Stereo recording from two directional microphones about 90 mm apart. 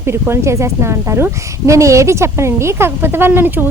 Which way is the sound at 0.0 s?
30° right (ahead or behind).